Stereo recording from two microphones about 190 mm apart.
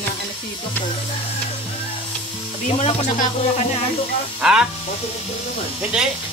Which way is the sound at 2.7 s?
35° left (ahead or behind).